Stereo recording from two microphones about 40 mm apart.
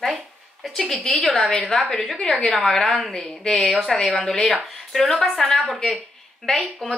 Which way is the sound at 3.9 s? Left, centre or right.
Centre.